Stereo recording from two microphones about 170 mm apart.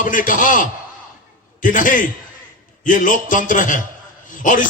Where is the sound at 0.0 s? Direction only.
50° left (ahead or behind).